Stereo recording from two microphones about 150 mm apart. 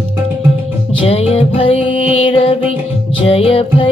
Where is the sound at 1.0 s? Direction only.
40° left (ahead or behind).